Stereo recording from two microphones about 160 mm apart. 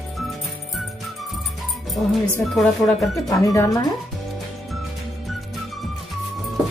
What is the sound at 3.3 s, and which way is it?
Speech, 20° left (ahead or behind).